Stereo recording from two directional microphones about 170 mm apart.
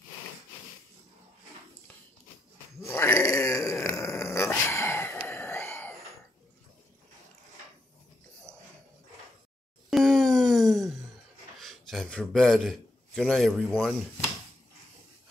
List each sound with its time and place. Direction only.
2.8 s a sound: 15° left (ahead or behind)
9.8 s wail: centre (ahead or behind)
11.5 s a man's voice: centre (ahead or behind)